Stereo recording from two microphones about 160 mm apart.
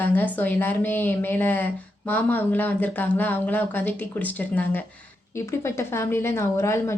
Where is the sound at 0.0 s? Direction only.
10° left (ahead or behind).